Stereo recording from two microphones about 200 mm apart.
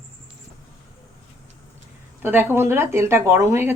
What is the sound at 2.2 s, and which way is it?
Speech, 10° right (ahead or behind).